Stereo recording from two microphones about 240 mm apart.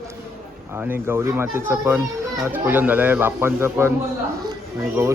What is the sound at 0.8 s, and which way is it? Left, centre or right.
Speech, centre.